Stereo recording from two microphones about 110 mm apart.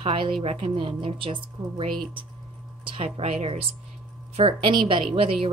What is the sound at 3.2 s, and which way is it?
Speech, 75° right (ahead or behind).